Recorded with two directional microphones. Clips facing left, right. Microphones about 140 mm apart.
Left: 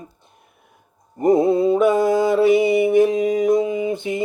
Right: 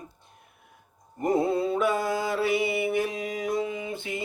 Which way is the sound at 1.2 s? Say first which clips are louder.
Left 9 dB; 20° left (ahead or behind).